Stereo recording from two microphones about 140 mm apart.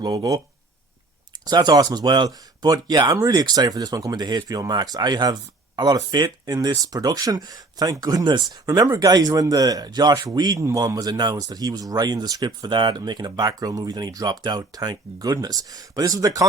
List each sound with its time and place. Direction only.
0.0 s speech: 25° right (ahead or behind)
1.5 s speech: 30° right (ahead or behind)